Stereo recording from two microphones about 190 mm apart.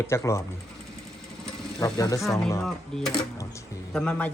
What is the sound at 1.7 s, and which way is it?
Speech, 20° left (ahead or behind).